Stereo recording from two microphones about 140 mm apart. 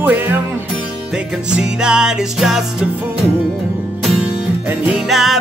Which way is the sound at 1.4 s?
5° right (ahead or behind).